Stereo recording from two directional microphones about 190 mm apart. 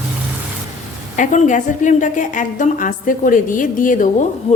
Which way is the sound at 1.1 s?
40° left (ahead or behind).